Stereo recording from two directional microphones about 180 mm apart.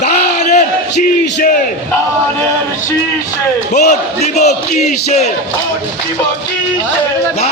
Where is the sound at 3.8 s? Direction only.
40° left (ahead or behind).